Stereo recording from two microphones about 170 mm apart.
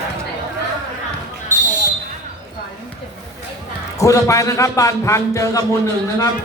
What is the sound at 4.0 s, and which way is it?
Speech, 20° left (ahead or behind).